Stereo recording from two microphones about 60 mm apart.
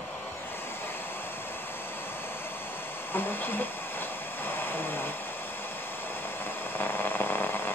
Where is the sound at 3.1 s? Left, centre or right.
Left.